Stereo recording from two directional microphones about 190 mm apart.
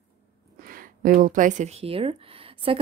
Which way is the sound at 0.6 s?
50° right (ahead or behind).